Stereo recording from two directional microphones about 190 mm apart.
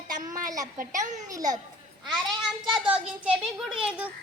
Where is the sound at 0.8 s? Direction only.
45° right (ahead or behind).